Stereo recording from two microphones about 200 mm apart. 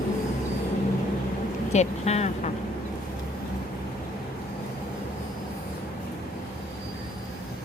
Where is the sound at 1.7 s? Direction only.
35° left (ahead or behind).